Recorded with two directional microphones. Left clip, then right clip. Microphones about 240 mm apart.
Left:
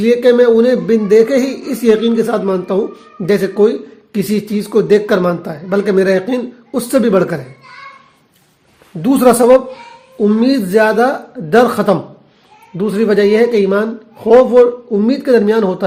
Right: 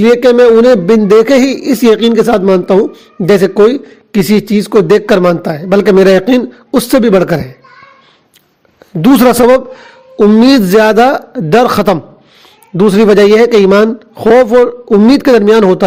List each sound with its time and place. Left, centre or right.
0.0 s a man's voice: right
9.0 s a woman's voice: right